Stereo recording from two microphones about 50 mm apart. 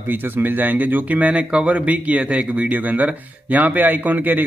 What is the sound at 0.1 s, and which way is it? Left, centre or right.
Speech, right.